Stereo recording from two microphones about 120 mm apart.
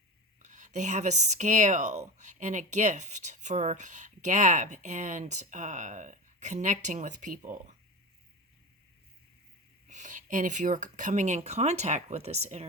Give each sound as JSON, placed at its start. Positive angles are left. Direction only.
{"t": 0.3, "sound": "speech", "side_deg": -90}
{"t": 9.8, "sound": "speech", "side_deg": -90}